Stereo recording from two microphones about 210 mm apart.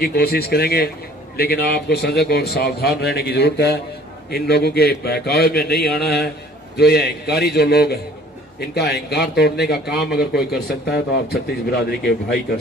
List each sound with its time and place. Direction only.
0.0 s a man's voice: 50° left (ahead or behind)